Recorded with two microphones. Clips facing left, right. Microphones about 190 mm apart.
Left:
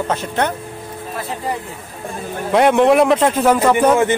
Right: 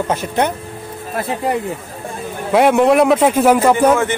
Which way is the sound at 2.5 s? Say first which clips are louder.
Right 1 dB; 5° right (ahead or behind).